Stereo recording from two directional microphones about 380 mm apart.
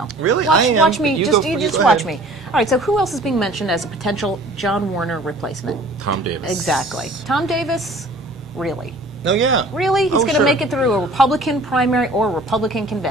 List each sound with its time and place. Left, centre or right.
0.2 s speech: right
0.8 s a woman's voice: centre
6.0 s speech: right
6.5 s a woman's voice: centre
9.2 s speech: right
9.8 s a woman's voice: centre